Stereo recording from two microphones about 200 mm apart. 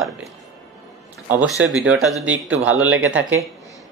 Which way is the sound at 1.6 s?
5° right (ahead or behind).